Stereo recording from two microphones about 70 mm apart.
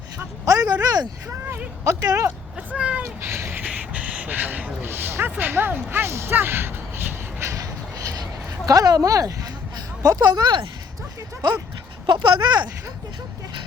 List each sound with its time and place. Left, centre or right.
0.4 s speech: right
1.8 s speech: right
2.6 s speech: centre
3.2 s speech: right
3.6 s speech: right
7.5 s a sound: right
9.0 s speech: right
12.1 s speech: right